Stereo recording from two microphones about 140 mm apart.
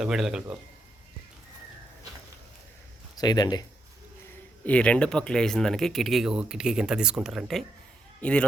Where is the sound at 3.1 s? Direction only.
30° left (ahead or behind).